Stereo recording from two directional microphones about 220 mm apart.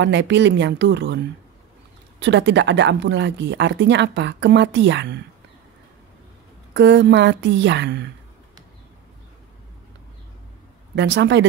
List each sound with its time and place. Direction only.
0.0 s speech: 55° right (ahead or behind)
6.7 s speech: 50° right (ahead or behind)
11.0 s speech: 55° right (ahead or behind)